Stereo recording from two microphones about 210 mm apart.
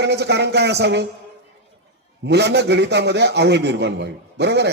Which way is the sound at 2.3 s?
55° right (ahead or behind).